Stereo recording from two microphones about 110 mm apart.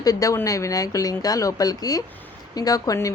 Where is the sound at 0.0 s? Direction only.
35° left (ahead or behind).